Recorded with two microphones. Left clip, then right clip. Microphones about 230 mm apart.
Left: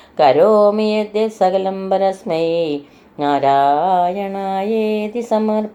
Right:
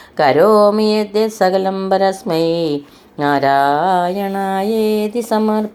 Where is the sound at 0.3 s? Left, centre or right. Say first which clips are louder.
Right 1 dB; right.